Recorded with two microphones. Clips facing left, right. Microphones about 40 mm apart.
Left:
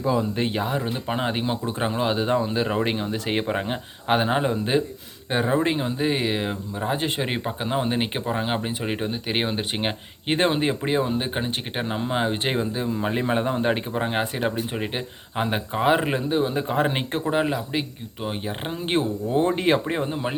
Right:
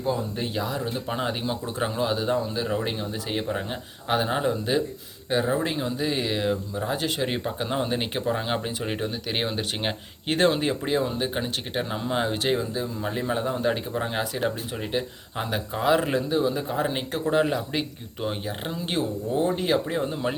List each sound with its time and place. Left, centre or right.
0.4 s speech: left
1.3 s speech: left
12.5 s speech: left
16.4 s speech: left
17.2 s speech: centre
18.7 s speech: left
19.4 s speech: left
20.0 s speech: left